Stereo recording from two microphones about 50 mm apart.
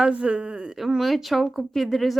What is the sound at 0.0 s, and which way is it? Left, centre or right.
Speech, right.